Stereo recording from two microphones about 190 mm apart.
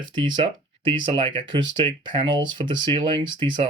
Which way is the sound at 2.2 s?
25° right (ahead or behind).